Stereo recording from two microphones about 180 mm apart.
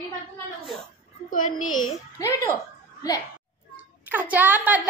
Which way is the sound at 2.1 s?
15° left (ahead or behind).